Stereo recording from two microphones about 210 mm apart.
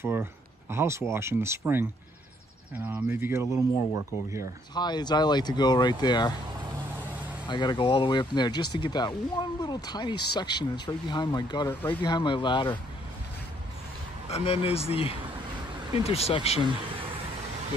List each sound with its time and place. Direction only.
0.0 s speech: 10° right (ahead or behind)
2.9 s speech: 10° right (ahead or behind)
4.7 s speech: 20° left (ahead or behind)
7.4 s speech: 20° left (ahead or behind)
14.3 s speech: 30° left (ahead or behind)